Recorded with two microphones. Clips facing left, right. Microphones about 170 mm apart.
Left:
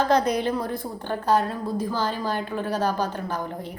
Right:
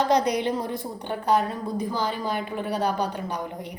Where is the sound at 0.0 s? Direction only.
15° right (ahead or behind).